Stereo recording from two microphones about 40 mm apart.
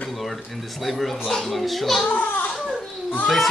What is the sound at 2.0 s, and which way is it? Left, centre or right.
Speech, left.